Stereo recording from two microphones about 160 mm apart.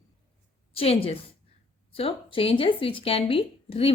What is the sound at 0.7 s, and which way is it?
Speech, 35° left (ahead or behind).